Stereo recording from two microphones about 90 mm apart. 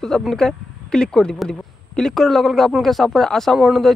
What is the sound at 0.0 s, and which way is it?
Speech, 5° left (ahead or behind).